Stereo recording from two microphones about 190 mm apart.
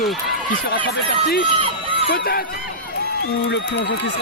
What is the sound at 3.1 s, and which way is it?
A man's voice, 65° left (ahead or behind).